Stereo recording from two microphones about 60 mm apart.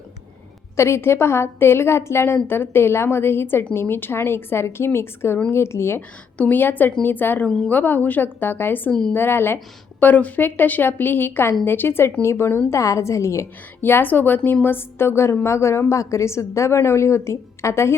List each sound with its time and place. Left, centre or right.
0.8 s a woman's voice: left
6.3 s a woman's voice: left
7.4 s a woman's voice: centre
7.7 s a woman's voice: left
8.9 s a woman's voice: centre
9.1 s a woman's voice: left
10.0 s a woman's voice: left
12.8 s a woman's voice: left
13.8 s a woman's voice: left